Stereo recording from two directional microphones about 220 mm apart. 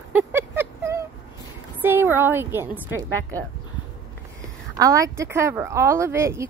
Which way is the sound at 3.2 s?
10° left (ahead or behind).